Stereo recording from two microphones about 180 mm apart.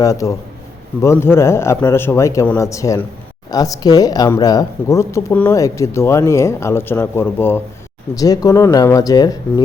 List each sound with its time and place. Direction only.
0.0 s speech: 20° left (ahead or behind)